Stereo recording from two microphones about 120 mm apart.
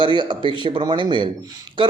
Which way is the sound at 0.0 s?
40° right (ahead or behind).